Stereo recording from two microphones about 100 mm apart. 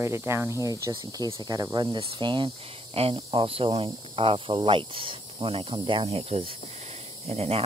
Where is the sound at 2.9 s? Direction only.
75° right (ahead or behind).